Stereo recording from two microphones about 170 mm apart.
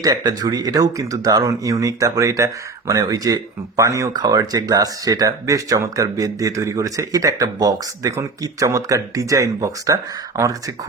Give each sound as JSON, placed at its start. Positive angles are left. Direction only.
{"t": 0.0, "sound": "speech", "side_deg": -20}